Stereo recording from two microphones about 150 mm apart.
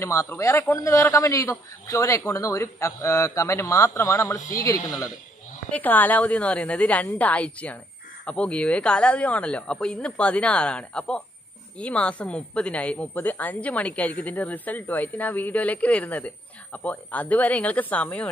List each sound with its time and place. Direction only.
0.0 s a man's voice: 20° left (ahead or behind)
5.7 s a woman's voice: 10° left (ahead or behind)